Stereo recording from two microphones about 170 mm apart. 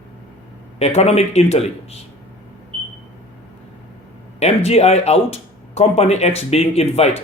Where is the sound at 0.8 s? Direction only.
40° left (ahead or behind).